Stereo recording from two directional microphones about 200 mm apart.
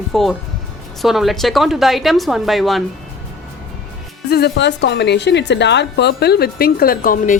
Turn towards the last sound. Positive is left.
turn(degrees=45)  # may be behind; listen again after turning